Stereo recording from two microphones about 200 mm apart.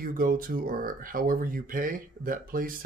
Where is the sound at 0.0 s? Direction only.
45° right (ahead or behind).